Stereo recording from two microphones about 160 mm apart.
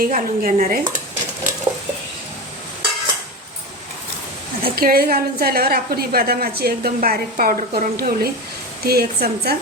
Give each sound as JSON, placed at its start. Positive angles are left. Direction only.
{"t": 0.0, "sound": "dishes", "side_deg": -55}
{"t": 4.6, "sound": "a woman's voice", "side_deg": -70}